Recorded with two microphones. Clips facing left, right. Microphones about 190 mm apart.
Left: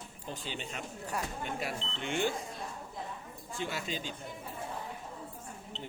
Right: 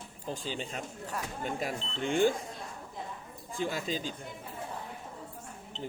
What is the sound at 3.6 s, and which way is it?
Speech, 40° right (ahead or behind).